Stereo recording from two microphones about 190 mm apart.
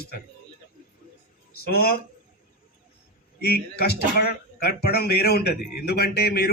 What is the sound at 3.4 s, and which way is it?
Speech, 55° left (ahead or behind).